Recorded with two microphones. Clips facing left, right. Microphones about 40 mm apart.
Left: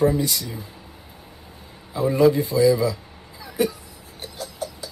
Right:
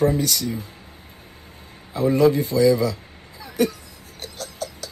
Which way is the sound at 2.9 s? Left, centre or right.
Right.